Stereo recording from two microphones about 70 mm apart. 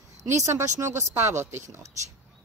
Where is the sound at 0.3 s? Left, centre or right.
Right.